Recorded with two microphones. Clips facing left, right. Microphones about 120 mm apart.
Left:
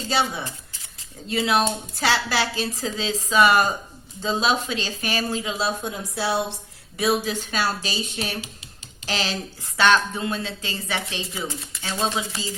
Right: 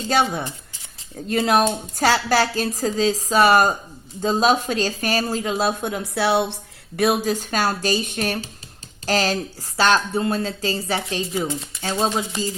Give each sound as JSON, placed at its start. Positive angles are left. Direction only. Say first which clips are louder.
{"t": 0.1, "sound": "speech", "louder": "right 4 dB", "side_deg": -50}